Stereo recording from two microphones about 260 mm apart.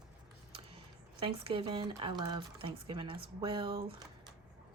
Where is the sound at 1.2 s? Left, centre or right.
Centre.